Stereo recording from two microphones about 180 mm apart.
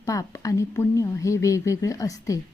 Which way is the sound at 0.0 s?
20° left (ahead or behind).